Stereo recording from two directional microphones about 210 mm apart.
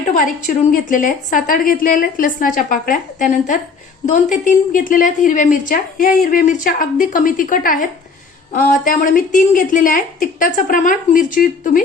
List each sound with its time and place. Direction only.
0.1 s a woman's voice: 40° left (ahead or behind)